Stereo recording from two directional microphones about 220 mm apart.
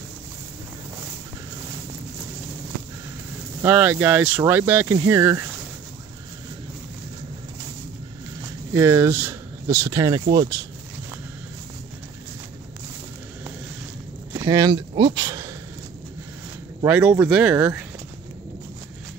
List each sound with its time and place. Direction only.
3.6 s speech: 10° right (ahead or behind)
8.4 s speech: 10° right (ahead or behind)
14.3 s speech: 15° right (ahead or behind)
16.8 s speech: 5° right (ahead or behind)